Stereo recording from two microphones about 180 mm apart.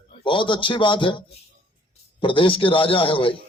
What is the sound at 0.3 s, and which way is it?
Speech, 25° left (ahead or behind).